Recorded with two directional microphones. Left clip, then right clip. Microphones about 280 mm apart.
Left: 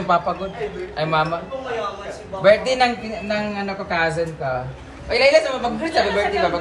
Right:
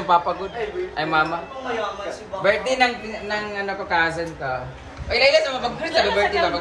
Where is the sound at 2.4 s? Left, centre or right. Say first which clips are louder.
Left 4 dB; centre.